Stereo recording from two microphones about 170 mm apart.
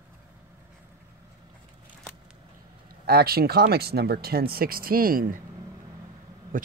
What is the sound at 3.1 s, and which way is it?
Speech, 65° right (ahead or behind).